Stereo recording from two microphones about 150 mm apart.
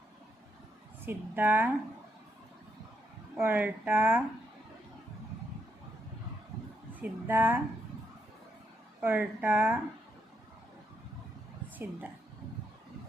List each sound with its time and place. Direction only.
1.0 s speech: 15° right (ahead or behind)
3.4 s speech: 15° right (ahead or behind)
7.0 s speech: 10° right (ahead or behind)
9.0 s speech: 10° right (ahead or behind)
11.8 s speech: 10° right (ahead or behind)